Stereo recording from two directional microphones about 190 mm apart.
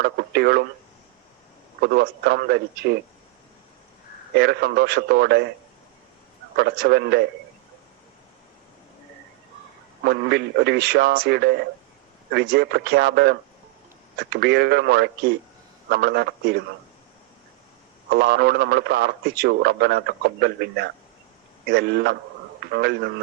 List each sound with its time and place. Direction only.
0.0 s speech: 60° right (ahead or behind)
1.8 s speech: 60° right (ahead or behind)
4.4 s speech: 60° right (ahead or behind)
6.6 s speech: 60° right (ahead or behind)
10.0 s speech: 60° right (ahead or behind)
18.1 s speech: 60° right (ahead or behind)